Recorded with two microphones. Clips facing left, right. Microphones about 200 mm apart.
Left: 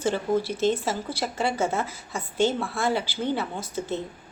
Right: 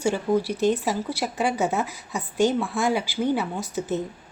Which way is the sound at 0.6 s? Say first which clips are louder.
Right 2 dB; 10° right (ahead or behind).